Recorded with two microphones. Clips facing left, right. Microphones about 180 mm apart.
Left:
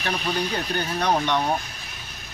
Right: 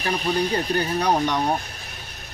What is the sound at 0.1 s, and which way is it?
Speech, 35° right (ahead or behind).